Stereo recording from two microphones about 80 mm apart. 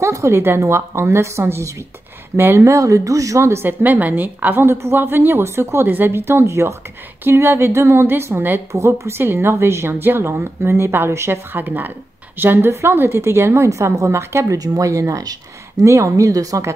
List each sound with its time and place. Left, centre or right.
0.0 s a woman's voice: right